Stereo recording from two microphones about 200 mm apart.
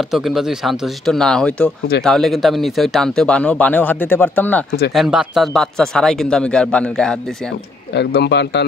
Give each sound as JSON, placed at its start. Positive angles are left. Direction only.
{"t": 0.1, "sound": "speech", "side_deg": 0}
{"t": 7.9, "sound": "speech", "side_deg": 55}